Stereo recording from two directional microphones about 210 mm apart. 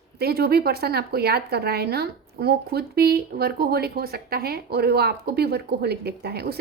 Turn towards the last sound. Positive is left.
turn(degrees=-50)  # may be behind; listen again after turning